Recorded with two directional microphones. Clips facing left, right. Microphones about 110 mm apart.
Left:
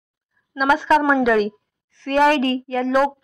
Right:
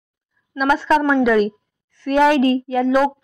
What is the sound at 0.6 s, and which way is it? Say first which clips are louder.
A woman's voice: even; centre (ahead or behind).